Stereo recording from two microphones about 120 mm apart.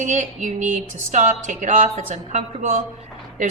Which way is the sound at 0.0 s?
90° right.